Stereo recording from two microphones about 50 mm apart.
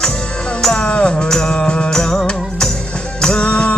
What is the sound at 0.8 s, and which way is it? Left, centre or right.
Music, left.